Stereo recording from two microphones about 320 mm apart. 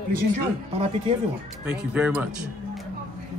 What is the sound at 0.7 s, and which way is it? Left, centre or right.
Speech, centre.